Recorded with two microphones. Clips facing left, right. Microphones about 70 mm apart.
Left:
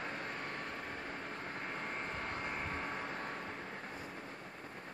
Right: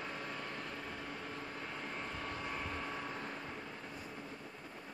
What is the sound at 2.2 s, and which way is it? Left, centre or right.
Vehicle, left.